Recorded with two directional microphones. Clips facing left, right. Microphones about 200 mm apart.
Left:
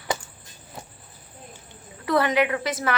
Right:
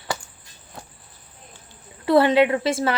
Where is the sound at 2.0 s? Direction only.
30° right (ahead or behind).